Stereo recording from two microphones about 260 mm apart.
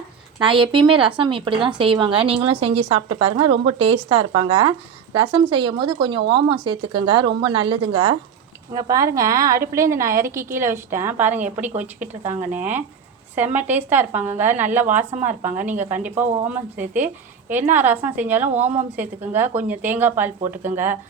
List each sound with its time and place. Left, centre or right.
0.3 s speech: centre